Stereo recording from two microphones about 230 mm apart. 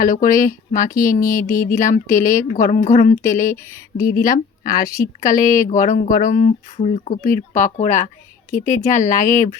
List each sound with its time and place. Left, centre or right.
0.0 s speech: left